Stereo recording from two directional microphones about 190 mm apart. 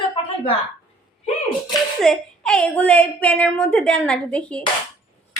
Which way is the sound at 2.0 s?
5° left (ahead or behind).